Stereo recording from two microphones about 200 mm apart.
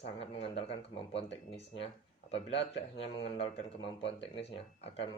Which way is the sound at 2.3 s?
30° left (ahead or behind).